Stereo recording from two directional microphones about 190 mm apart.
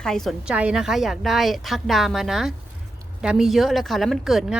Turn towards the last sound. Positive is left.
turn(degrees=0)  # may be behind; listen again after turning